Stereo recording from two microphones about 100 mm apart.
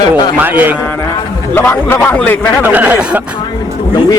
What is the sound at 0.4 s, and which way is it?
Speech, 20° right (ahead or behind).